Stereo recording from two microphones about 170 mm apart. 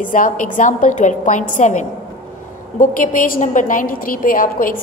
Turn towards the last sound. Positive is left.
turn(degrees=55)  # may be behind; listen again after turning